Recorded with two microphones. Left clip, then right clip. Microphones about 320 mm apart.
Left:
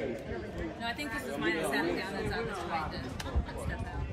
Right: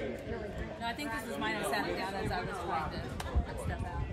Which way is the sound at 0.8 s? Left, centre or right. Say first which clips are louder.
Even; centre.